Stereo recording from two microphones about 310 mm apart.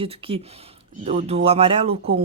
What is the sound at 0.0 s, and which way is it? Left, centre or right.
Speech, centre.